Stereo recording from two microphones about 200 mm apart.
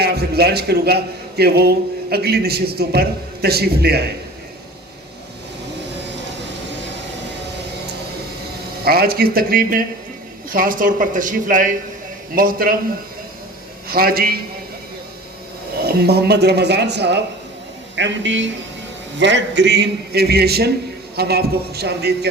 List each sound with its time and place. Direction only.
0.0 s a man's voice: 55° right (ahead or behind)
8.8 s a man's voice: 50° right (ahead or behind)
13.8 s a man's voice: 50° right (ahead or behind)
15.9 s a man's voice: 55° right (ahead or behind)